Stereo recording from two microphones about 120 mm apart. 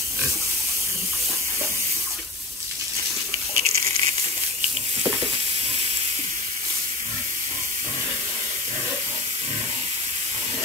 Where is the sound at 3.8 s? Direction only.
60° right (ahead or behind).